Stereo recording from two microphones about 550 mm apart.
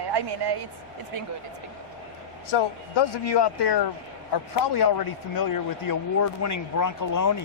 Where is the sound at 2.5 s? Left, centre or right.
Left.